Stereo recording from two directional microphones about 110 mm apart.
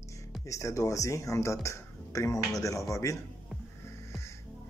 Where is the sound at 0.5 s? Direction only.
30° left (ahead or behind).